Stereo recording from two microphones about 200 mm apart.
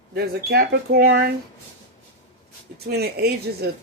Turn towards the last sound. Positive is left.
turn(degrees=-55)  # may be behind; listen again after turning